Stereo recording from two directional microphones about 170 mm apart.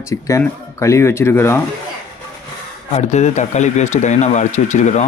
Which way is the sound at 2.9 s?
40° left (ahead or behind).